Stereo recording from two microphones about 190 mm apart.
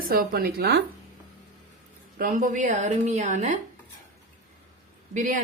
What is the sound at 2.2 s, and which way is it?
Speech, 45° right (ahead or behind).